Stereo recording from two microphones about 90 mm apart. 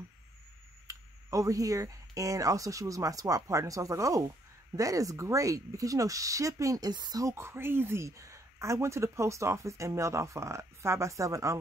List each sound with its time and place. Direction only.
0.8 s speech: 40° right (ahead or behind)